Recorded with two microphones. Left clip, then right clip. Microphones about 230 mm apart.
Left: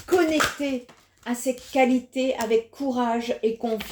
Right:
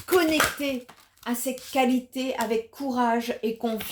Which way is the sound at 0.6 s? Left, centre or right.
Right.